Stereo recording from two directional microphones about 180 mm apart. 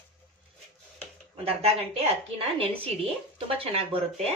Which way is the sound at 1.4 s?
35° right (ahead or behind).